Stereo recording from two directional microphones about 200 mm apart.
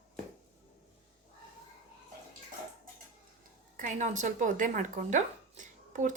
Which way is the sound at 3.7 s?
40° right (ahead or behind).